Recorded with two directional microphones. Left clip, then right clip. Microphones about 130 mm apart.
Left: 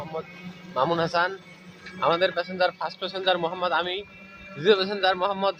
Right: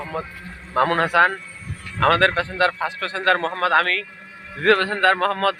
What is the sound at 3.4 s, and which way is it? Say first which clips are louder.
Speech: right 3 dB; 45° right (ahead or behind).